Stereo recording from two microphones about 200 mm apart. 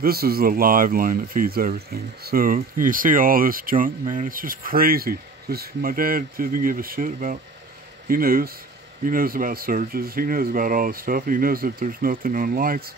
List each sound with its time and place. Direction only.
0.0 s speech: 50° right (ahead or behind)